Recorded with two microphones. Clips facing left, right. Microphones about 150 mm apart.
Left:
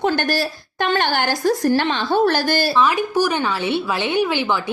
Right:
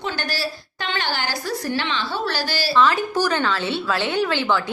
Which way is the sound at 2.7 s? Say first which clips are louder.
Right 3 dB; 15° left (ahead or behind).